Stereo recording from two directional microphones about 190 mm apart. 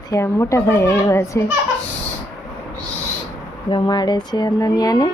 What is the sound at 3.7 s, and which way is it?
Speech, 25° left (ahead or behind).